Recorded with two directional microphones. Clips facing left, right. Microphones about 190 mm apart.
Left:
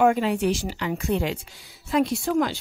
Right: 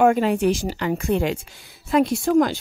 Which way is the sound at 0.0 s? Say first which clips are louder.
Right 3 dB; 50° right (ahead or behind).